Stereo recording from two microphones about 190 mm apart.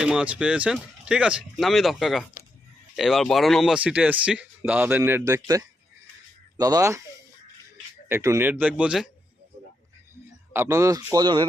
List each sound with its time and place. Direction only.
0.0 s speech: 5° right (ahead or behind)
8.1 s speech: 15° right (ahead or behind)
10.5 s speech: 15° right (ahead or behind)